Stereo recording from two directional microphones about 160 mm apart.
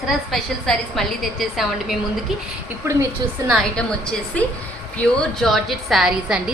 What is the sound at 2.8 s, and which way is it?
Speech, 15° right (ahead or behind).